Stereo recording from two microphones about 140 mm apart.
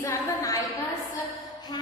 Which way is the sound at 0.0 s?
25° left (ahead or behind).